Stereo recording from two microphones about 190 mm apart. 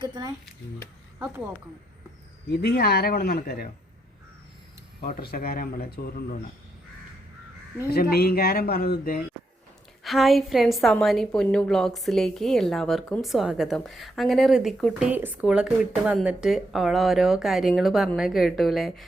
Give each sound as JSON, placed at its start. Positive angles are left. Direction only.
{"t": 0.0, "sound": "speech", "side_deg": -20}
{"t": 1.2, "sound": "speech", "side_deg": -10}
{"t": 2.6, "sound": "speech", "side_deg": 60}
{"t": 4.9, "sound": "speech", "side_deg": 50}
{"t": 7.9, "sound": "speech", "side_deg": 55}
{"t": 10.0, "sound": "a woman's voice", "side_deg": 0}